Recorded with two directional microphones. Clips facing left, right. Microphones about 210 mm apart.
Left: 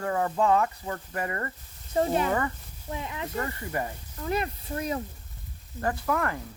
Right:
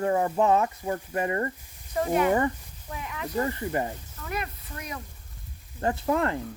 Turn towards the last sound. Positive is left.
turn(degrees=-25)  # may be behind; listen again after turning